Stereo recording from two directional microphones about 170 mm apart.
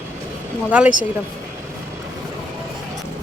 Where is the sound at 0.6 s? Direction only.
10° right (ahead or behind).